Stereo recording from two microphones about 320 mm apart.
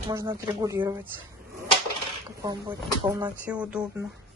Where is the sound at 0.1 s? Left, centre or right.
Centre.